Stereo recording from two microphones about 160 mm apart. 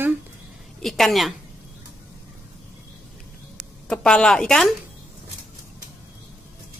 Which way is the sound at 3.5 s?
5° left (ahead or behind).